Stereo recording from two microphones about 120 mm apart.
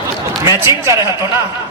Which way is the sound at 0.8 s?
25° right (ahead or behind).